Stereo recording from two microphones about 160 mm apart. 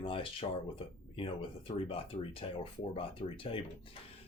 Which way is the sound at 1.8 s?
35° left (ahead or behind).